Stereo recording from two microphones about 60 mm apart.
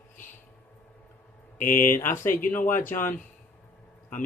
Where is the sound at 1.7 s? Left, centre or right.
Left.